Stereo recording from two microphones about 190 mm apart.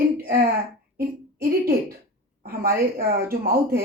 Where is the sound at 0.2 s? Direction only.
50° right (ahead or behind).